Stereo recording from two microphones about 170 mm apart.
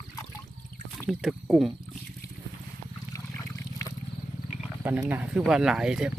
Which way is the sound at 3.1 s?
20° left (ahead or behind).